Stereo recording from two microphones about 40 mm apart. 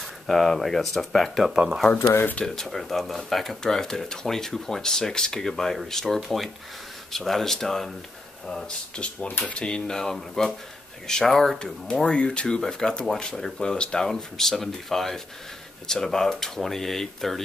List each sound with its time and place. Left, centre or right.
0.0 s speech: centre
1.5 s speech: right
2.4 s speech: centre
3.6 s speech: centre
8.9 s speech: left; by 11.6 s centre
11.6 s speech: left